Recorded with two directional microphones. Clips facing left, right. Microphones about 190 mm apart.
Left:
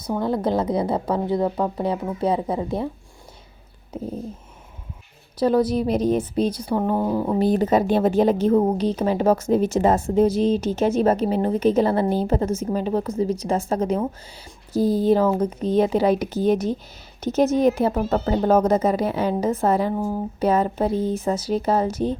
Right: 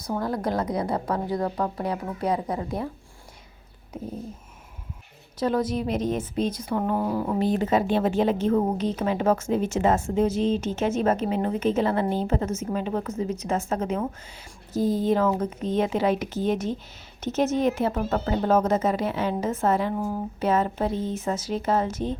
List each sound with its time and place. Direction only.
0.2 s speech: 25° left (ahead or behind)
5.4 s a woman's voice: 35° left (ahead or behind)
7.3 s a woman's voice: 40° left (ahead or behind)